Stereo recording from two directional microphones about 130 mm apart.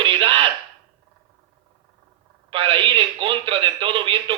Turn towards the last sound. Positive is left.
turn(degrees=-40)  # may be behind; listen again after turning